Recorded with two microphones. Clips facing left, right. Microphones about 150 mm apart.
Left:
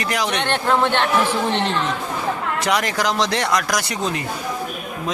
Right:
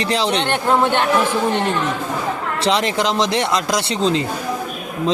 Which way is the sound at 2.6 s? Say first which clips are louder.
Right 3 dB; 25° right (ahead or behind).